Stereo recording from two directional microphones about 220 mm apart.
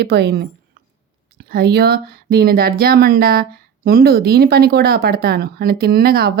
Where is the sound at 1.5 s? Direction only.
45° right (ahead or behind).